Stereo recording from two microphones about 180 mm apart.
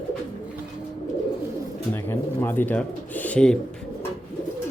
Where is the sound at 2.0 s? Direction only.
10° left (ahead or behind).